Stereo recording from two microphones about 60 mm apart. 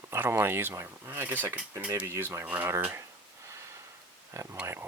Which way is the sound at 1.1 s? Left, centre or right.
Right.